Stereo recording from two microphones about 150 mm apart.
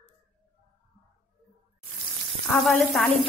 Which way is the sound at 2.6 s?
Centre (ahead or behind).